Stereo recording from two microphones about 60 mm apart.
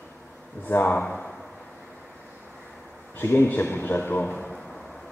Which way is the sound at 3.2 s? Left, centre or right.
Left.